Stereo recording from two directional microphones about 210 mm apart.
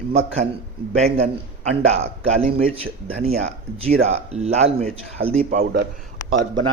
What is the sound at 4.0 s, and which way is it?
Speech, 30° right (ahead or behind).